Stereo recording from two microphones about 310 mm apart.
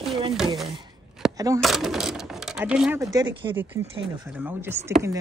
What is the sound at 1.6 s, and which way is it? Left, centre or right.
Speech, centre.